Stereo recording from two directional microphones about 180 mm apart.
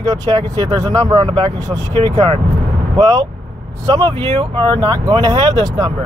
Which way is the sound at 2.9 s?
20° right (ahead or behind).